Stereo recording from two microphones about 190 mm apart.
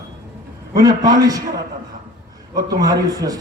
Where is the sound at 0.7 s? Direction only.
20° right (ahead or behind).